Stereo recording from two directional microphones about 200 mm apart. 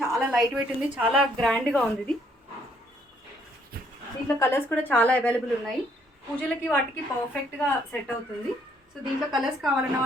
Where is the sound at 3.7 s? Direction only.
45° right (ahead or behind).